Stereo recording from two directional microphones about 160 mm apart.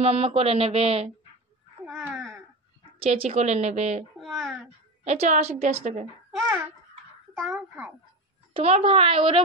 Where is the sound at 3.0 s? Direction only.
40° right (ahead or behind).